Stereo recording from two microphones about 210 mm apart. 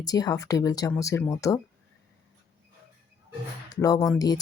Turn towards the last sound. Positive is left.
turn(degrees=20)  # may be behind; listen again after turning